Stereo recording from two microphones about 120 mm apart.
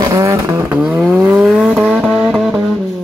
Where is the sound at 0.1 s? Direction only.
25° right (ahead or behind).